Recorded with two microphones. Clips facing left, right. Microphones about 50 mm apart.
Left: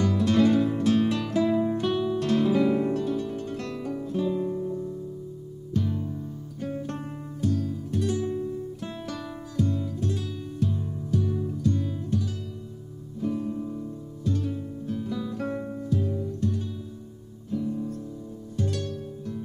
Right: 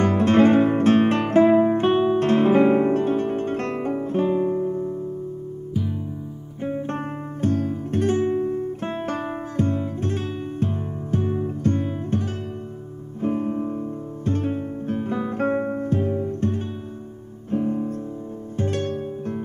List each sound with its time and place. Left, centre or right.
0.0 s guitar: right
5.7 s music: centre
6.6 s music: right
7.4 s guitar: right
13.2 s music: right